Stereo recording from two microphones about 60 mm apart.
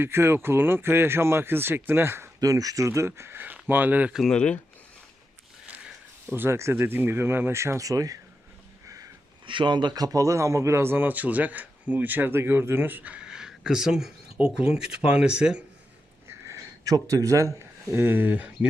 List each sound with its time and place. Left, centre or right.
0.0 s speech: right
2.4 s speech: right
3.3 s speech: right
4.2 s speech: centre
5.6 s sniff: right
6.2 s speech: right
7.8 s speech: right
9.9 s speech: right; by 15.6 s centre
16.5 s speech: right
17.9 s speech: right